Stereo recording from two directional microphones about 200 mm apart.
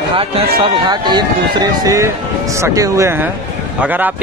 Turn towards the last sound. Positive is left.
turn(degrees=-10)  # may be behind; listen again after turning